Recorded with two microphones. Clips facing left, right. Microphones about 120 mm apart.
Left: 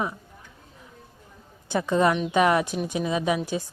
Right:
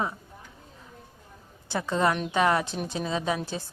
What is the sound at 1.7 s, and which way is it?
A woman's voice, 20° left (ahead or behind).